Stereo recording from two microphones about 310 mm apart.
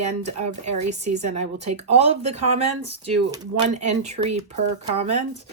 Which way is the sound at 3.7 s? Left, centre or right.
Right.